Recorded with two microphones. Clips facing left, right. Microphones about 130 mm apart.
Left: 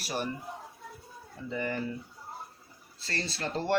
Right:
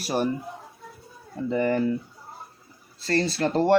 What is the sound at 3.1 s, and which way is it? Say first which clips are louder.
Speech: right 11 dB; 60° right (ahead or behind).